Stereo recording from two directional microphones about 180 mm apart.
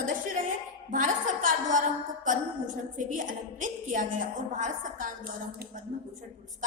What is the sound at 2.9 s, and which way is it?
A woman's voice, 45° right (ahead or behind).